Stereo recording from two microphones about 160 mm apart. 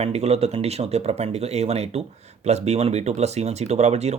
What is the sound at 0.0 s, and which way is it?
Speech, 40° right (ahead or behind).